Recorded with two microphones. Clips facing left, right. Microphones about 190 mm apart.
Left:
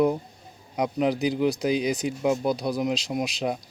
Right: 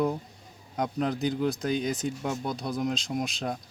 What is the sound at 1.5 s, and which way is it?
Speech, 75° left (ahead or behind).